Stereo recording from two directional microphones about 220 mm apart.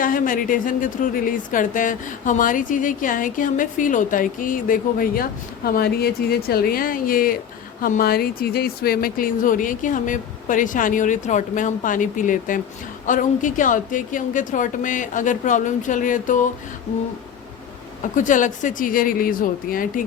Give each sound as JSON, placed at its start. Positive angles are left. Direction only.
{"t": 0.0, "sound": "a woman's voice", "side_deg": 40}
{"t": 18.2, "sound": "a woman's voice", "side_deg": 35}